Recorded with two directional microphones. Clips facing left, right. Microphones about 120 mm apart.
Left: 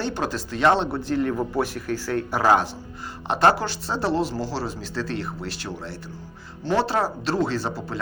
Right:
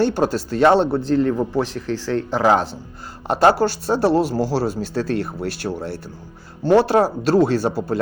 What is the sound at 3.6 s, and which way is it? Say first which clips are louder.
Speech: right 8 dB; 45° right (ahead or behind).